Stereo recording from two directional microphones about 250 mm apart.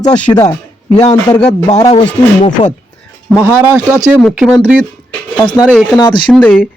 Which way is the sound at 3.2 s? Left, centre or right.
Centre.